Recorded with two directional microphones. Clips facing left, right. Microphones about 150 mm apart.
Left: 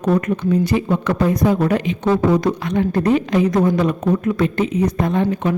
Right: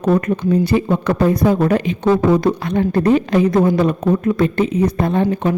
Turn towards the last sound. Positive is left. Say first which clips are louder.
# right 2 dB
turn(degrees=-35)  # may be behind; listen again after turning